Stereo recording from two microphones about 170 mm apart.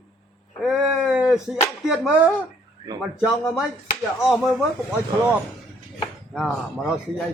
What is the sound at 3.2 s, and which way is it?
Speech, centre (ahead or behind).